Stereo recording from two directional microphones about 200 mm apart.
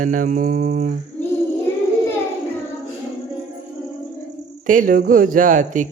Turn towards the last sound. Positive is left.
turn(degrees=-40)  # may be behind; listen again after turning